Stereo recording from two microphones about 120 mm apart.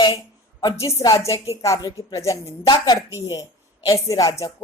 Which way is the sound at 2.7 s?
35° left (ahead or behind).